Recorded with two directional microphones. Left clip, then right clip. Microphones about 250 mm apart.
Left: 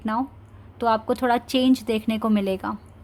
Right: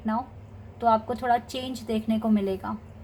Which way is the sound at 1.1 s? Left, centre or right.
Left.